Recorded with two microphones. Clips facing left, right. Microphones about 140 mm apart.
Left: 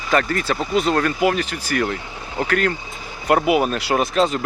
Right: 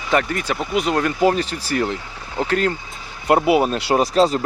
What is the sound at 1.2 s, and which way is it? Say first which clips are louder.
Speech: right 2 dB; 30° right (ahead or behind).